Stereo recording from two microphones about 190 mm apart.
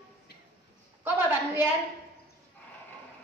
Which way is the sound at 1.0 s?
10° right (ahead or behind).